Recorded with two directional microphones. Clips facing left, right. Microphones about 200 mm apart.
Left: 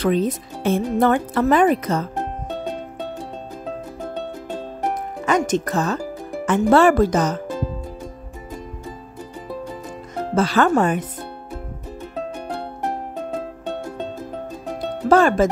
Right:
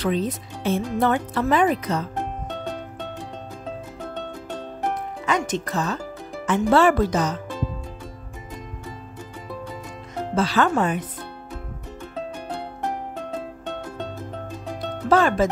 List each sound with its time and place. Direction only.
0.0 s speech: 50° left (ahead or behind)
5.2 s music: 45° left (ahead or behind)
6.4 s speech: 50° left (ahead or behind)
10.3 s speech: 50° left (ahead or behind)
15.0 s speech: 45° left (ahead or behind)